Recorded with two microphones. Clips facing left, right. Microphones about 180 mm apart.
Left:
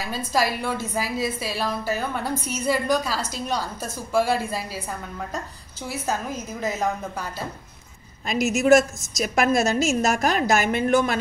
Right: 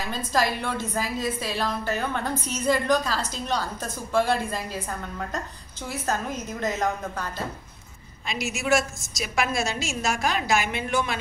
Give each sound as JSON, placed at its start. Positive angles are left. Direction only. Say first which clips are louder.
{"t": 0.0, "sound": "a woman's voice", "louder": "left 1 dB", "side_deg": 10}
{"t": 5.9, "sound": "a woman's voice", "louder": "left 1 dB", "side_deg": 10}
{"t": 8.3, "sound": "a woman's voice", "louder": "left 8 dB", "side_deg": 40}